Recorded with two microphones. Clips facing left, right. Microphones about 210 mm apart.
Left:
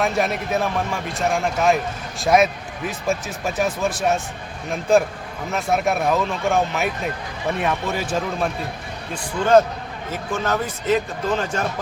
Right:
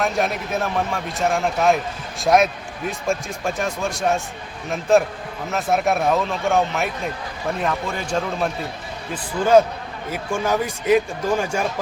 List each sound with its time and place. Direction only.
0.0 s a man's voice: centre (ahead or behind)
9.4 s speech: 10° right (ahead or behind)